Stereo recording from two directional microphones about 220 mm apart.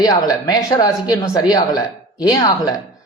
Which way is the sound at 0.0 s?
15° left (ahead or behind).